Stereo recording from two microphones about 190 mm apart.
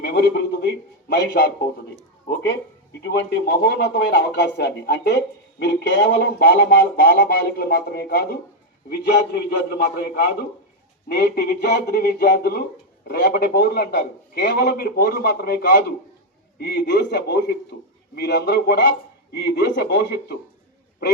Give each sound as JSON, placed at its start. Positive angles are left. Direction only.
{"t": 0.0, "sound": "a man's voice", "side_deg": 55}
{"t": 3.0, "sound": "speech", "side_deg": 60}
{"t": 6.4, "sound": "speech", "side_deg": 50}
{"t": 9.6, "sound": "speech", "side_deg": 60}